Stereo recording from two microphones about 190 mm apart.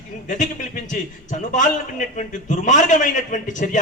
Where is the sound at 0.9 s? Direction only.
40° left (ahead or behind).